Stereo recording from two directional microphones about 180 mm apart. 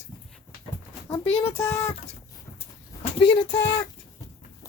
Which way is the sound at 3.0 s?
25° left (ahead or behind).